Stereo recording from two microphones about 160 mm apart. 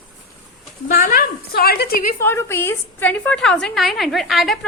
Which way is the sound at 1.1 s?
70° left (ahead or behind).